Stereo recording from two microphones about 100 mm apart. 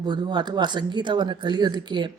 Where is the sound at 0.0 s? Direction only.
45° right (ahead or behind).